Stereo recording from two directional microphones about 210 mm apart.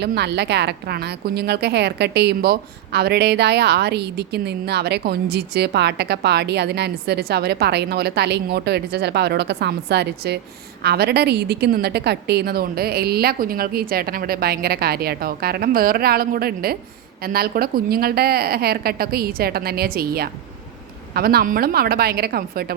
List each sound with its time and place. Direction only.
0.0 s a woman's voice: 55° right (ahead or behind)